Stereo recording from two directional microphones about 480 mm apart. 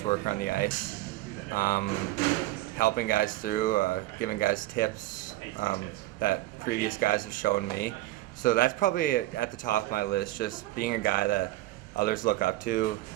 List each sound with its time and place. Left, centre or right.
0.0 s a man's voice: centre